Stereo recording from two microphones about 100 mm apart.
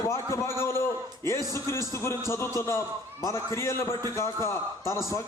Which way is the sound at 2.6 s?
30° left (ahead or behind).